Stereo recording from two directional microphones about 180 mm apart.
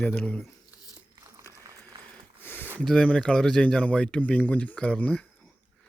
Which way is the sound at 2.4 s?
10° left (ahead or behind).